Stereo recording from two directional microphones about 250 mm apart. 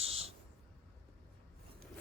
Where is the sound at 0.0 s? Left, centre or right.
Right.